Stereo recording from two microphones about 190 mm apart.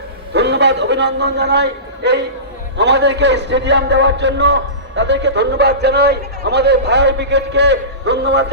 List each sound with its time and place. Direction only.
0.3 s a man's voice: 65° right (ahead or behind)